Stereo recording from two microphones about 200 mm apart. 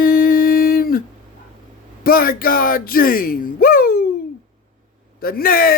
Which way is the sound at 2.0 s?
45° left (ahead or behind).